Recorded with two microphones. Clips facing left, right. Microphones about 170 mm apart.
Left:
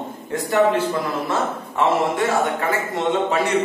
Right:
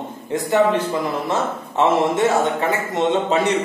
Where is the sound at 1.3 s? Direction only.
20° right (ahead or behind).